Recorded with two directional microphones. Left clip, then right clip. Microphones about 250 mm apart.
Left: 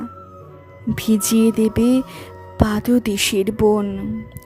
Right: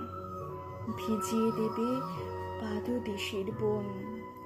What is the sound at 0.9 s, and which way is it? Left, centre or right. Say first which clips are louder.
Speech: left 13 dB; left.